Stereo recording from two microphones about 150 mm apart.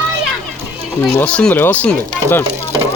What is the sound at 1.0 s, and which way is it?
Speech, 10° left (ahead or behind).